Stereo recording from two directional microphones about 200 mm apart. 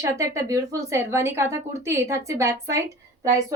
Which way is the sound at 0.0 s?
15° right (ahead or behind).